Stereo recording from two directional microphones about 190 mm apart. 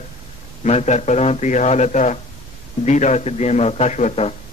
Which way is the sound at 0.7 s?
35° left (ahead or behind).